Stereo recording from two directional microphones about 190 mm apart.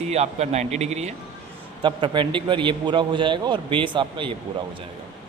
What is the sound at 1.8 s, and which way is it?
A man's voice, 25° right (ahead or behind).